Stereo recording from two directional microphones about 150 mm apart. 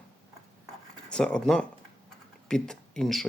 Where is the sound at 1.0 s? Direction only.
5° left (ahead or behind).